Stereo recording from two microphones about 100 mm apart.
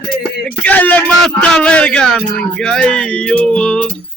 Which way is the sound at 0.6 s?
15° left (ahead or behind).